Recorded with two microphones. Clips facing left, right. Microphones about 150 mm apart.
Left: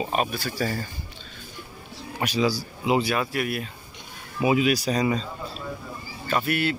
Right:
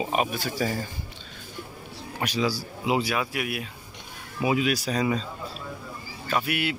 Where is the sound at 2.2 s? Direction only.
5° left (ahead or behind).